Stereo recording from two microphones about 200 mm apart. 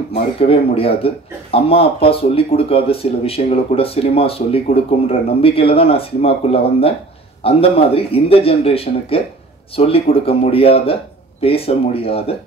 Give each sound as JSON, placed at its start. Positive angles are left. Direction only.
{"t": 0.1, "sound": "speech", "side_deg": 30}